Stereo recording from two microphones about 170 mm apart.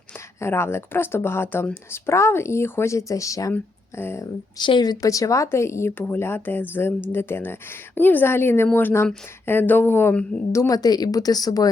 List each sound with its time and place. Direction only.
0.3 s speech: 15° left (ahead or behind)